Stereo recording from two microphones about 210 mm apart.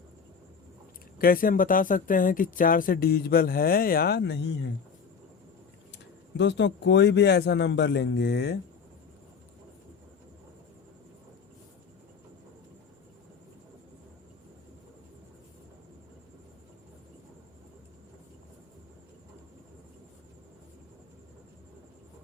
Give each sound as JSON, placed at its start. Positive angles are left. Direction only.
{"t": 1.2, "sound": "speech", "side_deg": 45}
{"t": 5.9, "sound": "speech", "side_deg": 55}